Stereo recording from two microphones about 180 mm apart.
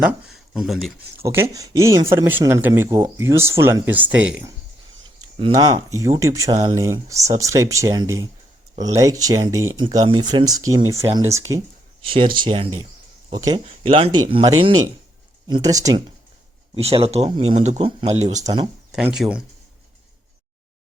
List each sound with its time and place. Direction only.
0.0 s speech: 5° right (ahead or behind)
1.2 s speech: 15° right (ahead or behind)
5.4 s speech: 25° right (ahead or behind)
16.7 s speech: 30° right (ahead or behind)
18.4 s speech: 25° right (ahead or behind)
18.9 s speech: 5° right (ahead or behind)